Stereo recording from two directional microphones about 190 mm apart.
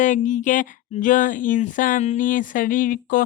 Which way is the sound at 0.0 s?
40° left (ahead or behind).